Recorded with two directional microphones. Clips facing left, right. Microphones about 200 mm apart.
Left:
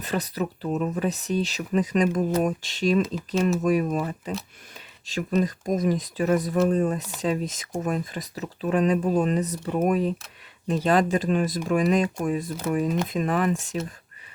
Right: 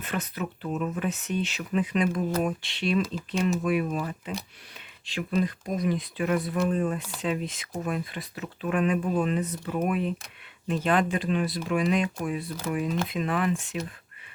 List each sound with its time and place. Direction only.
0.0 s speech: 35° left (ahead or behind)